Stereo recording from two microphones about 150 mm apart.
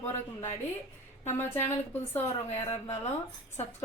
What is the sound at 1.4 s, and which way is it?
Speech, 15° left (ahead or behind).